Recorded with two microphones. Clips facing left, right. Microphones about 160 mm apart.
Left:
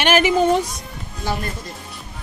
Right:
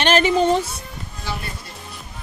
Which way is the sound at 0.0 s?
10° left (ahead or behind).